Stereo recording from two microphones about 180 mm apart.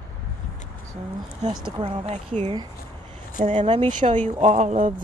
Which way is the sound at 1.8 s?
35° right (ahead or behind).